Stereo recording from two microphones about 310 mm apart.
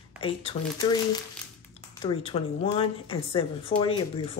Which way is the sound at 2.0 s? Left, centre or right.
Centre.